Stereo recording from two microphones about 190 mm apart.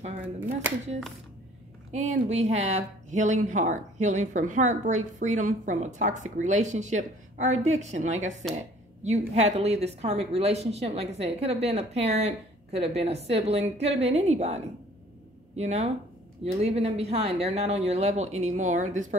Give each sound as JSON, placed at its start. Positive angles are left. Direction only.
{"t": 1.9, "sound": "speech", "side_deg": -35}